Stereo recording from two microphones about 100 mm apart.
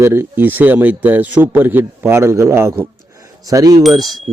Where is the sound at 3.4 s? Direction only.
40° right (ahead or behind).